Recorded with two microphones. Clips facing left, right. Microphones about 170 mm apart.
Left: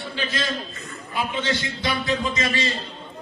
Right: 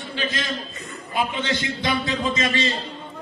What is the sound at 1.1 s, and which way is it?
A man's voice, 15° right (ahead or behind).